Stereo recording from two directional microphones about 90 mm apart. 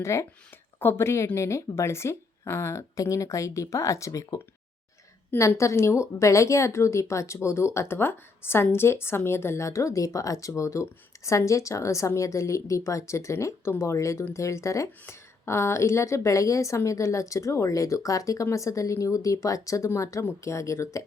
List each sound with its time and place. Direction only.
0.0 s a woman's voice: 30° left (ahead or behind)